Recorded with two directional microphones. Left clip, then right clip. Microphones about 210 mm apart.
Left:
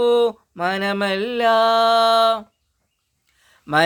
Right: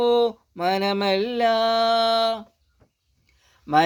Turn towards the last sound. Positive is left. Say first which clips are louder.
# even
turn(degrees=15)  # may be behind; listen again after turning